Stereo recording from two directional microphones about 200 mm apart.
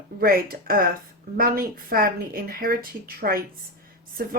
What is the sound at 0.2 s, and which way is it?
A woman's voice, 50° right (ahead or behind).